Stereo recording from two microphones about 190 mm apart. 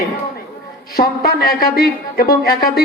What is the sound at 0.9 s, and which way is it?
Speech, 50° left (ahead or behind).